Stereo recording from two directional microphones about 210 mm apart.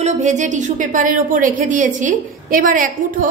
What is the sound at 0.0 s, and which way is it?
A woman's voice, 35° right (ahead or behind).